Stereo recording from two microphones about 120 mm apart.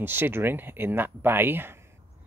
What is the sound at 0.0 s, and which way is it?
Speech, 15° right (ahead or behind).